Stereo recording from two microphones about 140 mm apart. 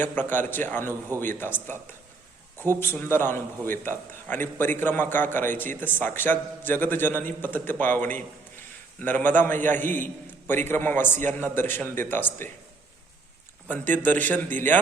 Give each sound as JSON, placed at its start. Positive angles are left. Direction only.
{"t": 0.0, "sound": "a man's voice", "side_deg": 15}
{"t": 2.8, "sound": "a man's voice", "side_deg": 15}
{"t": 13.7, "sound": "a man's voice", "side_deg": 10}